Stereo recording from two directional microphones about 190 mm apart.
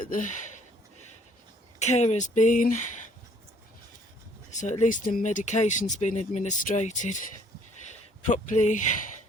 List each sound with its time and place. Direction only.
0.1 s a sound: 40° left (ahead or behind)
1.8 s speech: 35° left (ahead or behind)
4.5 s speech: 40° left (ahead or behind)
8.2 s speech: 40° left (ahead or behind)